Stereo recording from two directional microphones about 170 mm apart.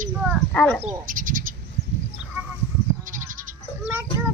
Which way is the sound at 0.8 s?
50° right (ahead or behind).